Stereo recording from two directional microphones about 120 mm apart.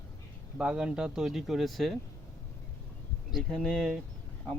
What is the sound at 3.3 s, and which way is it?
Speech, centre (ahead or behind).